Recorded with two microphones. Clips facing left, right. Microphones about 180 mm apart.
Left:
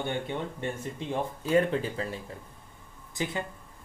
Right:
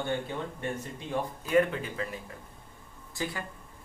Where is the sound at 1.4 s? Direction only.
30° left (ahead or behind).